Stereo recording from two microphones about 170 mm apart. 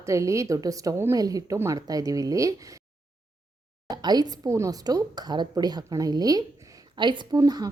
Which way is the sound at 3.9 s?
25° right (ahead or behind).